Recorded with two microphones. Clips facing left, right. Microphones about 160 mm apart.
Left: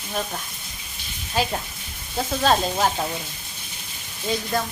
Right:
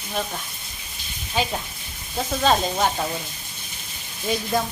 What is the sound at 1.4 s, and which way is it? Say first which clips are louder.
Sizzle: left 1 dB; 5° left (ahead or behind).